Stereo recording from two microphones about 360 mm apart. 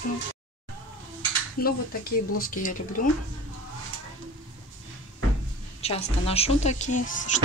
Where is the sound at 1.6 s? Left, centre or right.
Left.